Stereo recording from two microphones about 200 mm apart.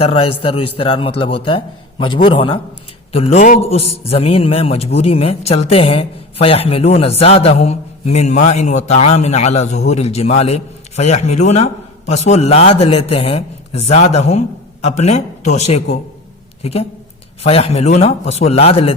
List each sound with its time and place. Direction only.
0.0 s a man's voice: 30° left (ahead or behind)
17.4 s a man's voice: 30° left (ahead or behind)